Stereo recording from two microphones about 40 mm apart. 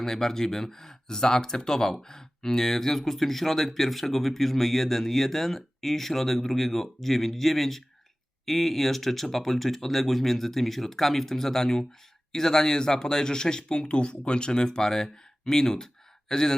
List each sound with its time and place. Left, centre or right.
0.0 s speech: centre